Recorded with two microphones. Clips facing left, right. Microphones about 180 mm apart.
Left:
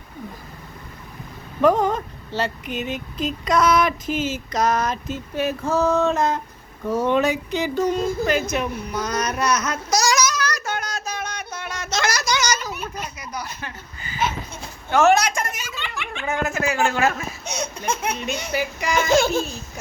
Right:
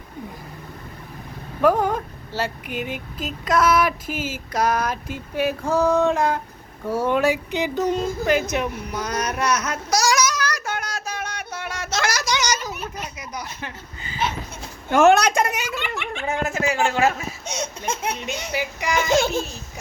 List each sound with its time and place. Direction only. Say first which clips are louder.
1.6 s speech: left 1 dB; 10° right (ahead or behind)
6.8 s a sound: even; 10° right (ahead or behind)
14.8 s a woman's voice: right 2 dB; 55° right (ahead or behind)
16.1 s speech: left 1 dB; 30° right (ahead or behind)